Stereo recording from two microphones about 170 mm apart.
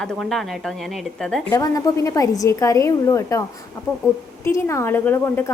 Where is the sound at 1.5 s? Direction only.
20° left (ahead or behind).